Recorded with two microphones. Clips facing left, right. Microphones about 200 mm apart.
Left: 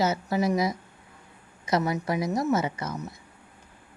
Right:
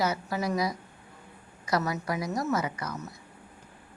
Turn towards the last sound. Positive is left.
turn(degrees=25)  # may be behind; listen again after turning